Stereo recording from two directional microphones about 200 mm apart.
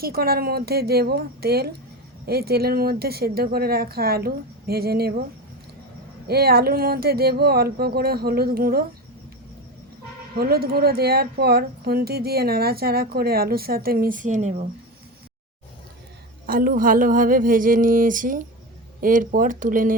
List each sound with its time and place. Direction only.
0.0 s speech: 50° right (ahead or behind)
6.2 s speech: 50° right (ahead or behind)
10.3 s speech: 50° right (ahead or behind)
16.5 s speech: 45° right (ahead or behind)